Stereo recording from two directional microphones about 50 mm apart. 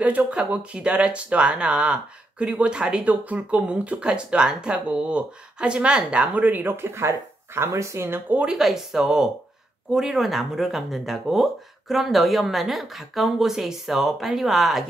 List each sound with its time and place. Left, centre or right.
0.0 s speech: right
3.1 s speech: right
6.3 s speech: right
6.7 s speech: right
8.5 s a woman's voice: centre